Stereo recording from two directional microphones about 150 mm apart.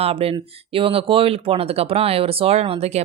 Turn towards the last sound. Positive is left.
turn(degrees=-45)  # may be behind; listen again after turning